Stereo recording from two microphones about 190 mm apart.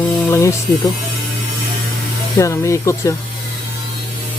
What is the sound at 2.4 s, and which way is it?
Speech, 15° left (ahead or behind).